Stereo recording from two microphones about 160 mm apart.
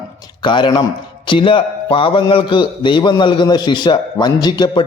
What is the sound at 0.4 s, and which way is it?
A man's voice, 30° left (ahead or behind).